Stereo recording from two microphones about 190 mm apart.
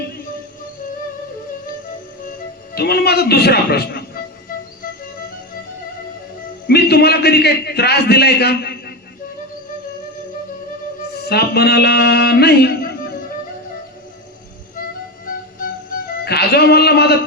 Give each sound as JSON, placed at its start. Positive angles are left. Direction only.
{"t": 2.7, "sound": "a man's voice", "side_deg": 55}
{"t": 6.7, "sound": "a man's voice", "side_deg": 55}
{"t": 11.3, "sound": "music", "side_deg": 55}
{"t": 16.2, "sound": "speech", "side_deg": 55}